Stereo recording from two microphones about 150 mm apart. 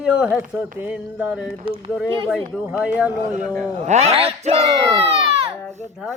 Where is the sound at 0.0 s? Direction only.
10° right (ahead or behind).